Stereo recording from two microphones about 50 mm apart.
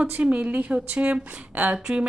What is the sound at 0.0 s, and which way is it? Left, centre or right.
A woman's voice, right.